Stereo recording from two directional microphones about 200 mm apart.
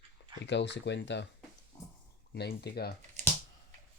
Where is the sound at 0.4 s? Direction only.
60° left (ahead or behind).